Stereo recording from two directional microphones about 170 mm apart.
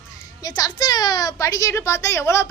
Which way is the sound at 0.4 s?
20° left (ahead or behind).